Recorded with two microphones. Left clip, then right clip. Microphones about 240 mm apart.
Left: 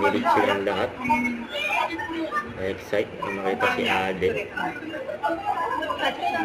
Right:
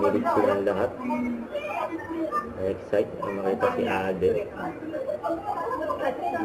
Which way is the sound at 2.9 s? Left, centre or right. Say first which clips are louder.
Even; left.